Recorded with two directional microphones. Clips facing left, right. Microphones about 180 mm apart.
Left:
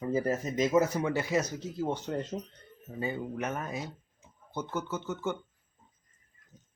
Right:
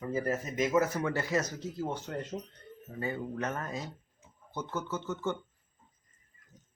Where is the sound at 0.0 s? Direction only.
25° left (ahead or behind).